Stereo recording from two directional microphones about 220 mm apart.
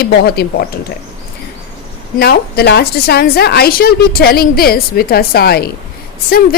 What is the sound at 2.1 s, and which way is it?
A woman's voice, 45° left (ahead or behind).